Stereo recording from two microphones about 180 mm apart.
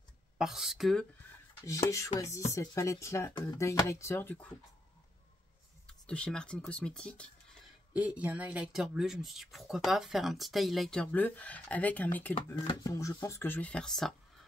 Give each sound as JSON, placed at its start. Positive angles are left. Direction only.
{"t": 0.4, "sound": "speech", "side_deg": 0}
{"t": 1.7, "sound": "speech", "side_deg": 15}
{"t": 5.9, "sound": "speech", "side_deg": 5}
{"t": 7.9, "sound": "speech", "side_deg": -10}
{"t": 12.5, "sound": "speech", "side_deg": 25}